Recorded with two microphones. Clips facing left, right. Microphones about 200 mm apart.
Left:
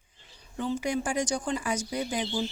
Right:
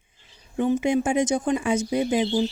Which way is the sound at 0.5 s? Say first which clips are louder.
Right 8 dB; 20° right (ahead or behind).